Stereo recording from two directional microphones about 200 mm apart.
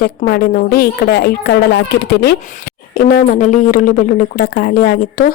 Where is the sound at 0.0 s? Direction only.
50° left (ahead or behind).